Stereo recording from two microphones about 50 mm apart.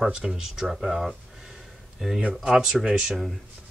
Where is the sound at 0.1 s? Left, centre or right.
Centre.